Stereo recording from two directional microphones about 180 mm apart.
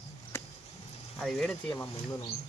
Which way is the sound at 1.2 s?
Centre (ahead or behind).